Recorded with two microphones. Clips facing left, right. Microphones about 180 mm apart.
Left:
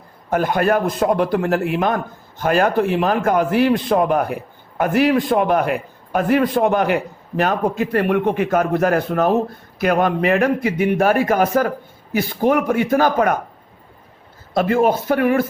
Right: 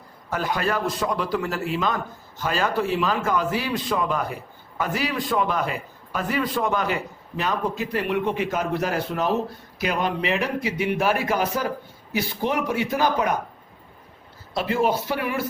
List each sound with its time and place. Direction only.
0.3 s a man's voice: 55° left (ahead or behind)
14.5 s a man's voice: 50° left (ahead or behind)